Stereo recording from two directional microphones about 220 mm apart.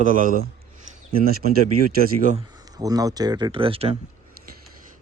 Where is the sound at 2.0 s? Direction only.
35° right (ahead or behind).